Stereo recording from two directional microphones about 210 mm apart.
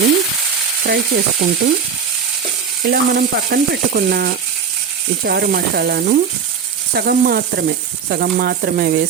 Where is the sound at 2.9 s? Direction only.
50° right (ahead or behind).